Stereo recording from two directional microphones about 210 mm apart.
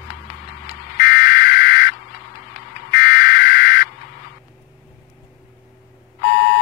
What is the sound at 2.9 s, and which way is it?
Fire alarm, 45° left (ahead or behind).